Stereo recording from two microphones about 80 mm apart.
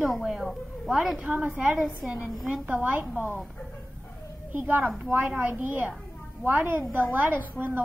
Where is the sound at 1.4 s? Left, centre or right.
Centre.